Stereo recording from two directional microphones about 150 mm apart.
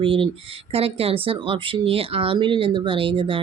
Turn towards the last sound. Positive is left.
turn(degrees=-35)  # may be behind; listen again after turning